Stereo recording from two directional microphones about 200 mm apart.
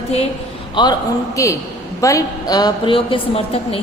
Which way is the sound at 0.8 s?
20° left (ahead or behind).